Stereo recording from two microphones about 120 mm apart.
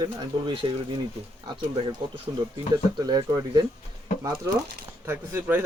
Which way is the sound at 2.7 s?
35° right (ahead or behind).